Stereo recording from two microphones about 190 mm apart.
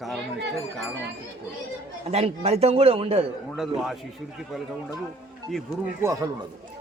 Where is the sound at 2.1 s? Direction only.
35° right (ahead or behind).